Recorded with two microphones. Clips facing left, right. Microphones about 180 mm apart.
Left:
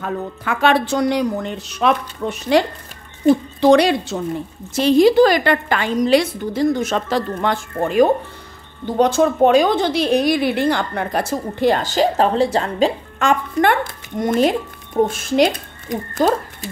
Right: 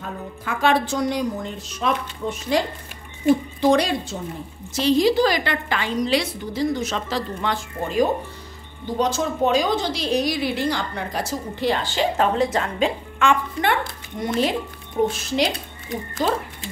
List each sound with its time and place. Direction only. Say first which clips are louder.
0.0 s speech: left 7 dB; 70° left (ahead or behind)
3.6 s speech: left 6 dB; 75° left (ahead or behind)
4.7 s a woman's voice: left 6 dB; 55° left (ahead or behind)